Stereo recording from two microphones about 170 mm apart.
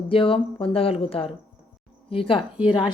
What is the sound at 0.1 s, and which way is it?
A woman's voice, 30° left (ahead or behind).